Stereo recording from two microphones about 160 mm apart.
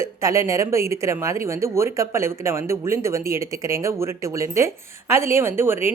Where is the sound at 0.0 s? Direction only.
20° right (ahead or behind).